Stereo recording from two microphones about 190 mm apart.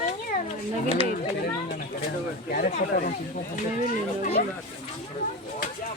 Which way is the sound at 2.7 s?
45° left (ahead or behind).